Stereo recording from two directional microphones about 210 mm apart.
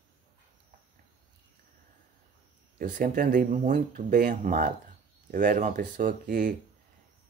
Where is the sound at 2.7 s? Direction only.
40° right (ahead or behind).